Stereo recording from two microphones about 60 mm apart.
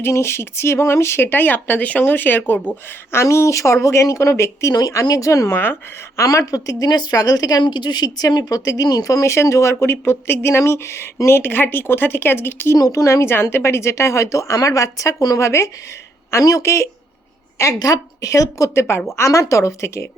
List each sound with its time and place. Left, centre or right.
0.0 s speech: left
3.2 s a woman's voice: left
4.8 s a woman's voice: left
9.3 s speech: left
12.7 s a woman's voice: left
13.1 s a woman's voice: left
15.4 s a woman's voice: left
16.4 s a woman's voice: left
16.6 s speech: left
17.6 s a woman's voice: left